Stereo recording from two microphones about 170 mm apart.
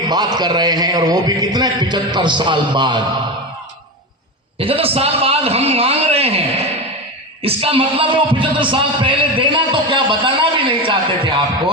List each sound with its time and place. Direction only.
0.1 s a man's voice: 25° right (ahead or behind)
4.5 s a man's voice: 35° right (ahead or behind)
7.4 s a man's voice: 35° right (ahead or behind)